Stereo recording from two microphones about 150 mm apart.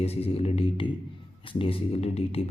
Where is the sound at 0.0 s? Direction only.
40° left (ahead or behind).